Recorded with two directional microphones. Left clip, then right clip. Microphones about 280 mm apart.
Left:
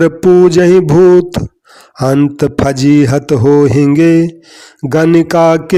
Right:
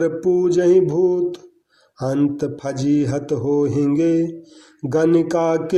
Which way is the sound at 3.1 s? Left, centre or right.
Left.